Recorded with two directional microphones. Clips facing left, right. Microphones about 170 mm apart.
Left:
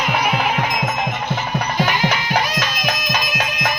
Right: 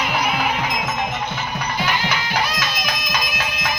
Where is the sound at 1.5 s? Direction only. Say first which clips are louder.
Left 3 dB; 40° left (ahead or behind).